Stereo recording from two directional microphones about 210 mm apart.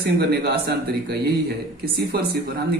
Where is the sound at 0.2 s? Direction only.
50° right (ahead or behind).